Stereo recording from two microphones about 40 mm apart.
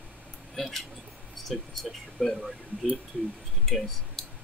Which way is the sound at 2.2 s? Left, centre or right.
Centre.